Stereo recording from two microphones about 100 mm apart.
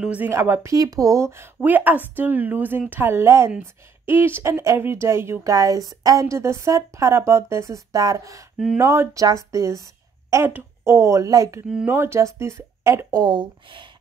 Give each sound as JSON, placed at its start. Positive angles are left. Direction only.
{"t": 0.0, "sound": "speech", "side_deg": -15}
{"t": 0.3, "sound": "speech", "side_deg": -25}
{"t": 1.6, "sound": "speech", "side_deg": -20}
{"t": 13.1, "sound": "speech", "side_deg": -45}